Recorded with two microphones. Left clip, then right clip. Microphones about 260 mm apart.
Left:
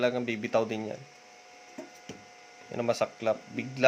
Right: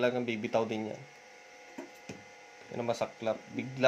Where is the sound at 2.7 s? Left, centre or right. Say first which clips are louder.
Left 5 dB; centre.